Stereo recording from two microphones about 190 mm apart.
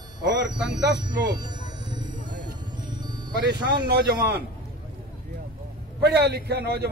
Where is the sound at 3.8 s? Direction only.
60° right (ahead or behind).